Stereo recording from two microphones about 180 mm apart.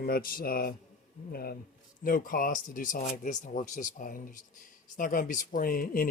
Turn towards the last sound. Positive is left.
turn(degrees=55)  # may be behind; listen again after turning